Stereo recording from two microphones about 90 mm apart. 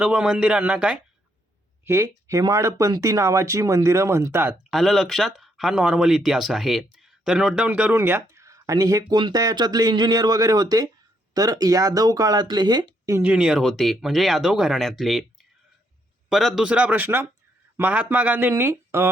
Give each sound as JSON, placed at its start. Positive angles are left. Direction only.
{"t": 0.0, "sound": "speech", "side_deg": -5}
{"t": 1.8, "sound": "speech", "side_deg": -30}
{"t": 4.7, "sound": "speech", "side_deg": 5}
{"t": 7.9, "sound": "speech", "side_deg": -25}
{"t": 8.3, "sound": "speech", "side_deg": -35}
{"t": 13.2, "sound": "speech", "side_deg": -10}
{"t": 16.6, "sound": "speech", "side_deg": -15}